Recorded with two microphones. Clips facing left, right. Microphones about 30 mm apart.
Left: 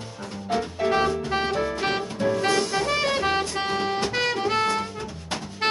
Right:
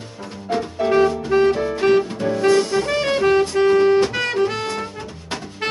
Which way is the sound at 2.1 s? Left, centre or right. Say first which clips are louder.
Right 2 dB; centre.